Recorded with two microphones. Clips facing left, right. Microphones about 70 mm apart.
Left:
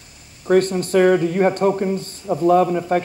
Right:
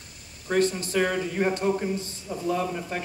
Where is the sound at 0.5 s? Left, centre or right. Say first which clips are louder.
Left 8 dB; left.